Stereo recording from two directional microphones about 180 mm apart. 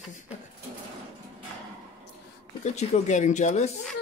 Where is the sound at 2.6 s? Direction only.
40° left (ahead or behind).